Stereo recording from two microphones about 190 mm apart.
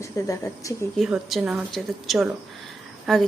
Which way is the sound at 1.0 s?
Centre (ahead or behind).